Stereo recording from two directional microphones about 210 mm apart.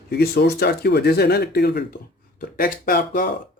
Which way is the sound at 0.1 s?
50° left (ahead or behind).